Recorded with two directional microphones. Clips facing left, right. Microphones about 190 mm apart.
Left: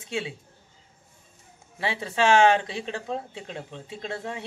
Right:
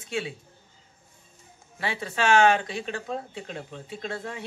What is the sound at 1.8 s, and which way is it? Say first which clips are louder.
A man's voice: left 3 dB; 25° left (ahead or behind).